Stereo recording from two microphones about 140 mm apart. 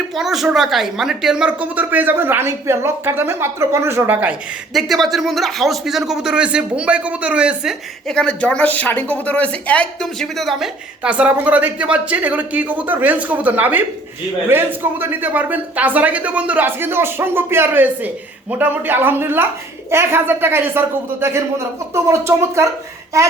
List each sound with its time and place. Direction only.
0.2 s a woman's voice: 5° right (ahead or behind); by 22.6 s 20° right (ahead or behind)